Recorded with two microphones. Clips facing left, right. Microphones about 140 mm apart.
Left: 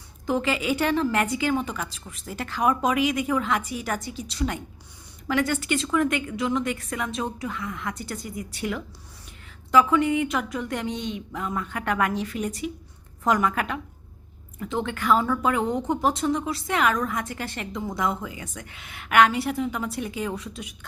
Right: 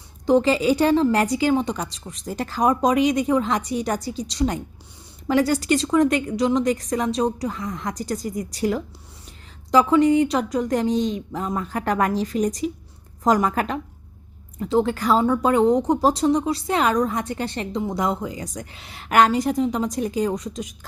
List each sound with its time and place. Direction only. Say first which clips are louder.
0.3 s a woman's voice: right 7 dB; 30° right (ahead or behind)